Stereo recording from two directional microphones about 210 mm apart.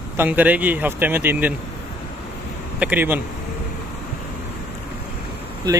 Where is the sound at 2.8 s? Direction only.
10° right (ahead or behind).